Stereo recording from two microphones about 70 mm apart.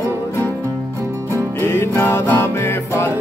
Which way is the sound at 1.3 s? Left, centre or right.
Left.